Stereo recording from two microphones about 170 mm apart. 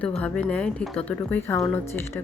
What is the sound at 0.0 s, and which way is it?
Speech, 5° left (ahead or behind).